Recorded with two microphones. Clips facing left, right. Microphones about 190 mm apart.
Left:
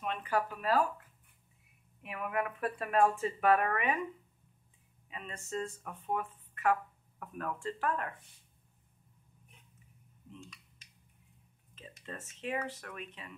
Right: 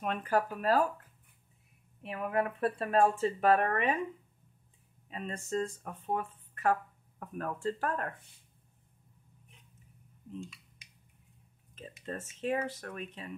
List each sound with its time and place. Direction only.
0.0 s speech: 45° right (ahead or behind)
2.0 s speech: 30° right (ahead or behind)
5.1 s speech: 35° right (ahead or behind)
12.0 s speech: 40° right (ahead or behind)